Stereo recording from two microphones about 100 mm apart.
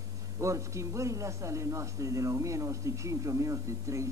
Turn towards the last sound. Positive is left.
turn(degrees=-30)  # may be behind; listen again after turning